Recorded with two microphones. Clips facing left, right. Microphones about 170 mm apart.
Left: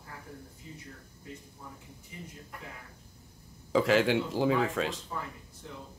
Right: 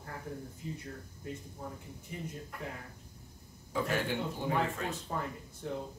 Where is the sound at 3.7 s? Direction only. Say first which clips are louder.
Left 8 dB; 90° left.